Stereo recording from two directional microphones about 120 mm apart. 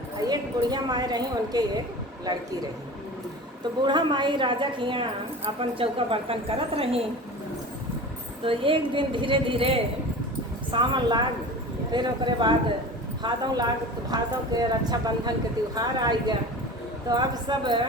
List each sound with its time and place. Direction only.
0.2 s a woman's voice: 35° right (ahead or behind)
3.8 s a woman's voice: 40° right (ahead or behind)
8.4 s a woman's voice: 45° right (ahead or behind)
10.7 s a woman's voice: 40° right (ahead or behind)